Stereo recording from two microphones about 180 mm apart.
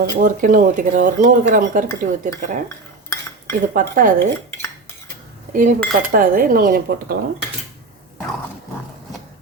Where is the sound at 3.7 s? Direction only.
50° right (ahead or behind).